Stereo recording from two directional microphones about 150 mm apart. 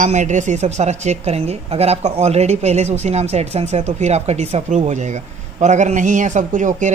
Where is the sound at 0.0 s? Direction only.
55° right (ahead or behind).